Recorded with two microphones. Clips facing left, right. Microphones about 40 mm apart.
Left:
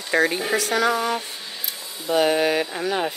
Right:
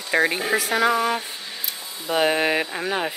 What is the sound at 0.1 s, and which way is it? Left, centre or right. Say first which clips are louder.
Speech: even; centre.